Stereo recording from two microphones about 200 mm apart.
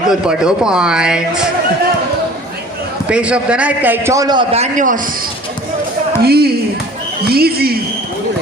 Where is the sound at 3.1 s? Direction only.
5° right (ahead or behind); by 5.0 s 40° right (ahead or behind).